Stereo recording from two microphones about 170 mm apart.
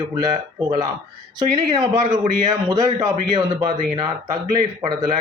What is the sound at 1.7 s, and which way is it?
A man's voice, 20° right (ahead or behind).